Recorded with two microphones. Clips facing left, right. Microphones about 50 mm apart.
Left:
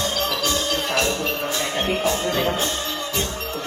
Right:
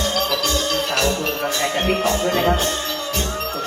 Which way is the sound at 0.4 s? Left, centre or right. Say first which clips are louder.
Right 2 dB; right.